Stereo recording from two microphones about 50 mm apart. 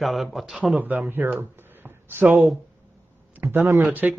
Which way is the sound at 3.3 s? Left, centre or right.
Right.